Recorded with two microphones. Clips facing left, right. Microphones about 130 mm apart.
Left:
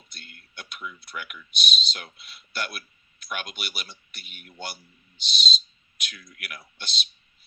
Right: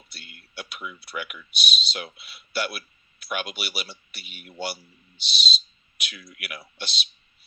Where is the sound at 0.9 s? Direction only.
5° right (ahead or behind).